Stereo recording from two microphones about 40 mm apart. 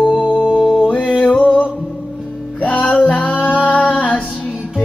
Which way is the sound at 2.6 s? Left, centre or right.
Left.